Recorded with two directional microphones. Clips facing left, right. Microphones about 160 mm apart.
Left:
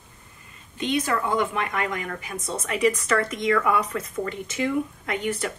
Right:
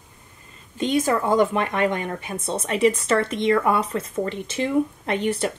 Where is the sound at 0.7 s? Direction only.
40° right (ahead or behind).